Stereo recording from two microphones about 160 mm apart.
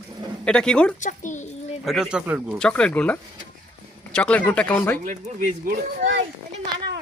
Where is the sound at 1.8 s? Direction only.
Centre (ahead or behind).